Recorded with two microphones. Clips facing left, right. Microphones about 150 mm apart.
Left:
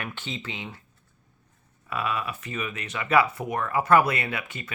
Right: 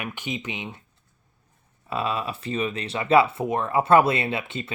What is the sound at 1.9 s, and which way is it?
Speech, 30° right (ahead or behind).